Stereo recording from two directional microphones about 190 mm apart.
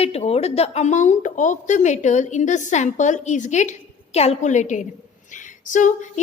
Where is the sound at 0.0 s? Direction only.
35° left (ahead or behind).